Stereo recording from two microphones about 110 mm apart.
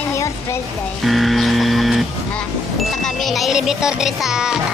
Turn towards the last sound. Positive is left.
turn(degrees=-5)  # may be behind; listen again after turning